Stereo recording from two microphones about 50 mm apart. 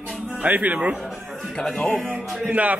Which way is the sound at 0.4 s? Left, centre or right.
Right.